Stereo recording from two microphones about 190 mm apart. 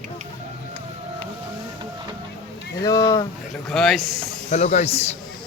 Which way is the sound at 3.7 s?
5° left (ahead or behind).